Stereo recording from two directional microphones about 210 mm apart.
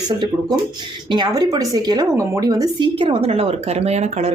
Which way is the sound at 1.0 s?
20° right (ahead or behind).